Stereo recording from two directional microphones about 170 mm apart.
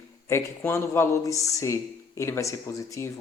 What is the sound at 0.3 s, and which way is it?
Speech, 15° left (ahead or behind).